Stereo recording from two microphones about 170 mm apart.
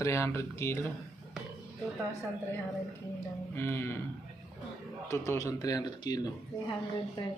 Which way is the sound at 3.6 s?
15° left (ahead or behind).